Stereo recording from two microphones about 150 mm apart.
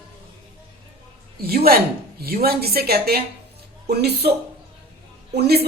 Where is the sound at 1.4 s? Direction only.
90° right.